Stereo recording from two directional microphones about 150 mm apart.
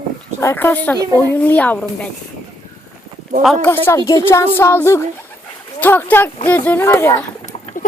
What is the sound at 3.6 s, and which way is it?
Speech, 15° left (ahead or behind).